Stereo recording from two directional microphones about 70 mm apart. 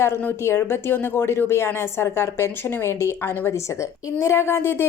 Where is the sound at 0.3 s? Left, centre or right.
Left.